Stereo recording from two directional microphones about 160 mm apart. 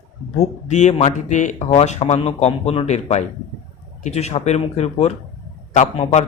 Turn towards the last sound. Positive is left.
turn(degrees=45)  # may be behind; listen again after turning